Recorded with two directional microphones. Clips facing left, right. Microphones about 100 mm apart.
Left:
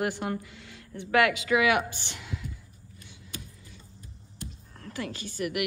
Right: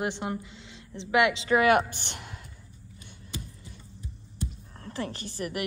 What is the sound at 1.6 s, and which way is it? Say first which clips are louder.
Speech: right 3 dB; 45° right (ahead or behind).